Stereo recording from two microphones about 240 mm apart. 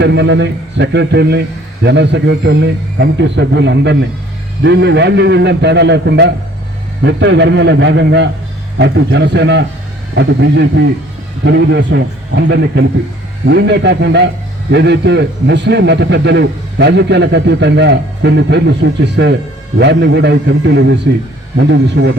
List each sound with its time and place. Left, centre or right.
0.0 s a man's voice: right